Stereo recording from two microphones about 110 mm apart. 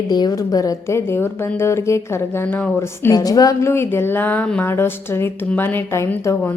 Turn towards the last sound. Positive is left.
turn(degrees=25)  # may be behind; listen again after turning